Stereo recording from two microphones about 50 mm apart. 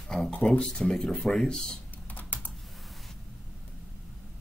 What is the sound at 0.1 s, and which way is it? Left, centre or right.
Speech, centre.